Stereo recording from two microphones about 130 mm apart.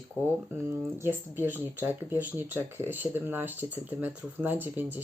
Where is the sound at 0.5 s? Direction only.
20° right (ahead or behind).